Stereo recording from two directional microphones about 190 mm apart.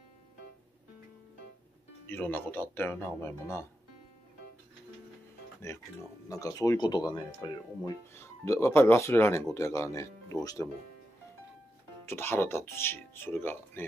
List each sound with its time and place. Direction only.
2.0 s speech: 10° left (ahead or behind)
6.2 s speech: 15° left (ahead or behind)
12.1 s speech: 10° left (ahead or behind)